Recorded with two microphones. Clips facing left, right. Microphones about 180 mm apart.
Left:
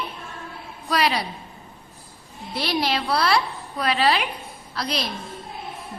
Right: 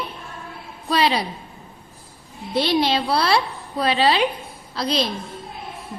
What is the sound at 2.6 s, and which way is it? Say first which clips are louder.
A woman's voice: right 5 dB; 25° right (ahead or behind).